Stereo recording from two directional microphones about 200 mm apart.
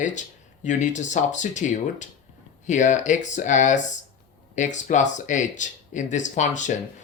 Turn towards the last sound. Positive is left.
turn(degrees=40)  # may be behind; listen again after turning